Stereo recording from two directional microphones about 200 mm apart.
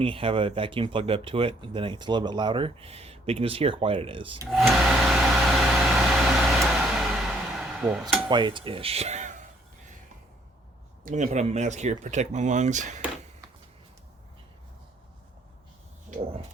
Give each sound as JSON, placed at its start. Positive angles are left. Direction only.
{"t": 0.0, "sound": "speech", "side_deg": -25}
{"t": 4.5, "sound": "a sound", "side_deg": 0}
{"t": 8.3, "sound": "speech", "side_deg": -20}
{"t": 11.0, "sound": "speech", "side_deg": -35}
{"t": 16.0, "sound": "vehicle", "side_deg": -35}